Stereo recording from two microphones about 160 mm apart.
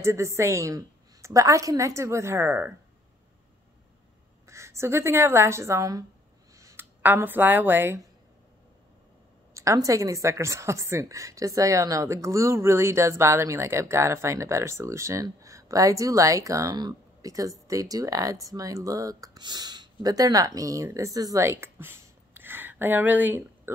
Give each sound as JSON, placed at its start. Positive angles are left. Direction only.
{"t": 0.0, "sound": "a woman's voice", "side_deg": -20}
{"t": 4.5, "sound": "a woman's voice", "side_deg": -15}
{"t": 9.5, "sound": "a sound", "side_deg": -20}
{"t": 9.8, "sound": "a woman's voice", "side_deg": -20}